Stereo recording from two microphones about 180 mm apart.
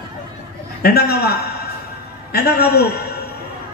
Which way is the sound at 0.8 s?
60° left (ahead or behind).